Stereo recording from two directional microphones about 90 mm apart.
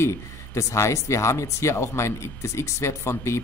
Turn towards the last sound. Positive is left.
turn(degrees=30)  # may be behind; listen again after turning